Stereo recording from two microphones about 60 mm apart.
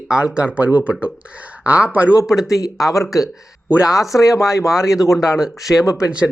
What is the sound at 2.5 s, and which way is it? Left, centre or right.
Speech, left.